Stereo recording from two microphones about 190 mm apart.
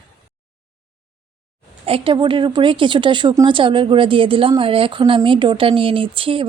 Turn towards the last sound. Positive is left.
turn(degrees=-30)  # may be behind; listen again after turning